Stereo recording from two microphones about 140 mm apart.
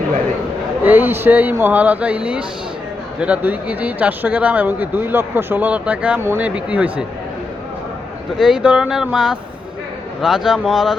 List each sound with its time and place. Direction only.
0.9 s speech: 15° right (ahead or behind)
8.4 s speech: 5° right (ahead or behind)